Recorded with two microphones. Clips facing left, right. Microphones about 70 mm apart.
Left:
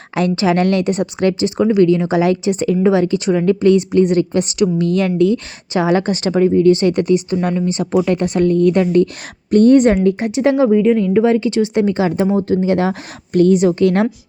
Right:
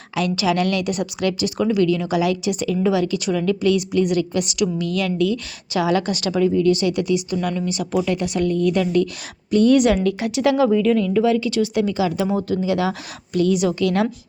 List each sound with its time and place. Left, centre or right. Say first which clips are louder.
0.1 s a woman's voice: left 5 dB; left
12.3 s speech: left 6 dB; left
12.5 s a woman's voice: left 5 dB; left